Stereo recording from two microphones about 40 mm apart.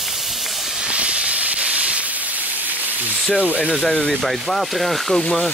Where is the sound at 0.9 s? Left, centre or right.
Right.